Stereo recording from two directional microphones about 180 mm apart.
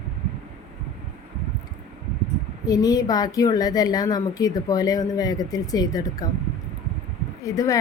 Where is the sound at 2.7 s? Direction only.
20° left (ahead or behind).